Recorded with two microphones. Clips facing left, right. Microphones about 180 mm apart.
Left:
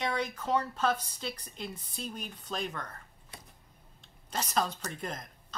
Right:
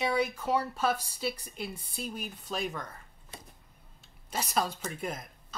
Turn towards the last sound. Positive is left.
turn(degrees=-5)  # may be behind; listen again after turning